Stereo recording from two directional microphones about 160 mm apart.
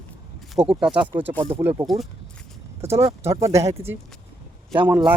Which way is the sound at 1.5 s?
15° right (ahead or behind).